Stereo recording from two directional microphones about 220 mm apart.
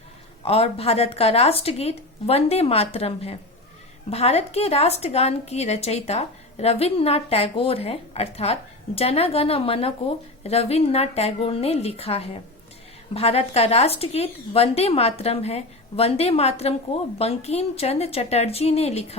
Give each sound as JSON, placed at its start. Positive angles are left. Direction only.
{"t": 0.4, "sound": "a woman's voice", "side_deg": 25}